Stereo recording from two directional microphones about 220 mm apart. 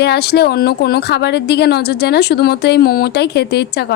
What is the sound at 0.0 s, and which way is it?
Speech, 45° left (ahead or behind).